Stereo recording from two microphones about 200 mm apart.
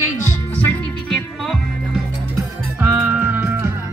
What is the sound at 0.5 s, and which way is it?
Music, 10° left (ahead or behind).